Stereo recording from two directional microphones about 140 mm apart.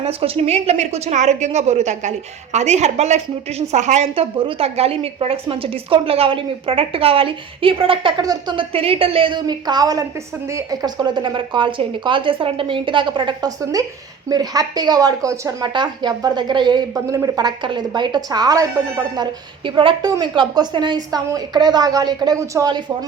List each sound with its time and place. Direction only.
0.0 s a woman's voice: 45° right (ahead or behind)
16.9 s a woman's voice: 25° right (ahead or behind)